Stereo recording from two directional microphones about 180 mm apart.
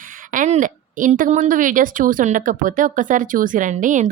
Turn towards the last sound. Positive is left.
turn(degrees=-45)  # may be behind; listen again after turning